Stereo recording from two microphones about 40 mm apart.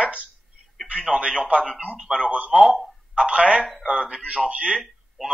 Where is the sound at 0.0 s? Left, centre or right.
Right.